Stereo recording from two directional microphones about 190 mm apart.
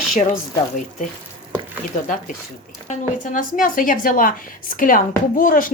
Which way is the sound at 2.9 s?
45° left (ahead or behind).